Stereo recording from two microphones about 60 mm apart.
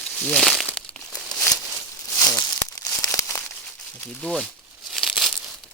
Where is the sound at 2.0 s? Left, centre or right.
Left.